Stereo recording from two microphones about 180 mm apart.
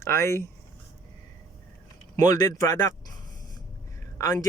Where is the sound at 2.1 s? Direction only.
20° left (ahead or behind).